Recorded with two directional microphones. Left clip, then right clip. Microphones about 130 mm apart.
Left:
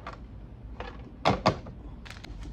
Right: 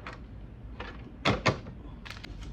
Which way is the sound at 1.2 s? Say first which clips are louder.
Left 2 dB; 20° left (ahead or behind).